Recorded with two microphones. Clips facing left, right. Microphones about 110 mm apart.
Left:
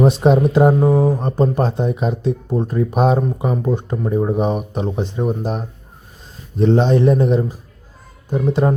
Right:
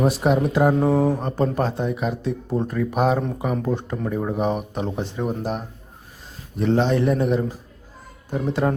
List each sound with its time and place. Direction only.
0.0 s a man's voice: 25° left (ahead or behind)